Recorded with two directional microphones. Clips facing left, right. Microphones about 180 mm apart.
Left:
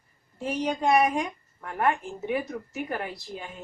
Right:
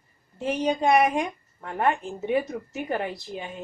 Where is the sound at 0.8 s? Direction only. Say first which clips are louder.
Right 1 dB; 20° right (ahead or behind).